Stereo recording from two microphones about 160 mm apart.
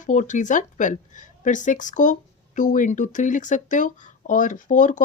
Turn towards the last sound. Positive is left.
turn(degrees=55)  # may be behind; listen again after turning